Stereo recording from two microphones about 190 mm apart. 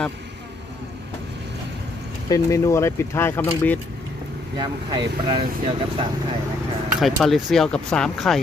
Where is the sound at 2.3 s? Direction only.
15° left (ahead or behind).